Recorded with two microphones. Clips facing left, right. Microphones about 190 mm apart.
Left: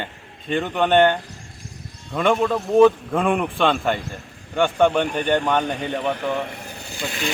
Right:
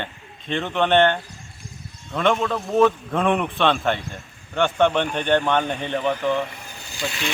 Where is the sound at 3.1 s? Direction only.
Centre (ahead or behind).